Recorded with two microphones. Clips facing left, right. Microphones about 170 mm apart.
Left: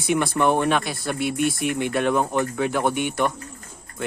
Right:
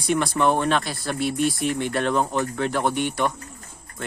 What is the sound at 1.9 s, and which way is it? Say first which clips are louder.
Speech: left 3 dB; 5° left (ahead or behind).